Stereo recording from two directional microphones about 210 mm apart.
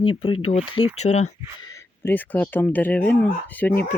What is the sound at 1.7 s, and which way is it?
Speech, 10° left (ahead or behind).